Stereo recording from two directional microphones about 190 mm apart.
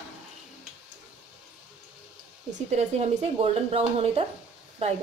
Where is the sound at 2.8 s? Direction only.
35° right (ahead or behind).